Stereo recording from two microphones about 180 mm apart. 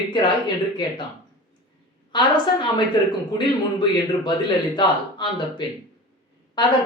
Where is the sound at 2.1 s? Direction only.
25° left (ahead or behind).